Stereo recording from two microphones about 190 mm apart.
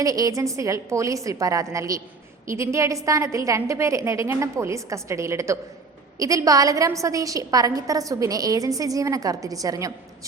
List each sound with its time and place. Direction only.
0.0 s a woman's voice: 20° right (ahead or behind)